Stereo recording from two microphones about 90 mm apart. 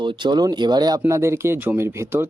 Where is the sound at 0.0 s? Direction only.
60° right (ahead or behind).